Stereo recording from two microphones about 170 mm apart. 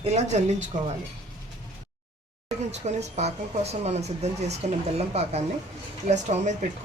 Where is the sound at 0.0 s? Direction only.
40° right (ahead or behind).